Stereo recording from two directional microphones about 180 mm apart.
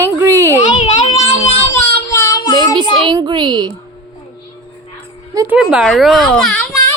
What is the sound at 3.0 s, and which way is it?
Speech, 25° right (ahead or behind).